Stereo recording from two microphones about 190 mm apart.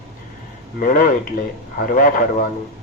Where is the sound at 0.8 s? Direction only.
45° left (ahead or behind).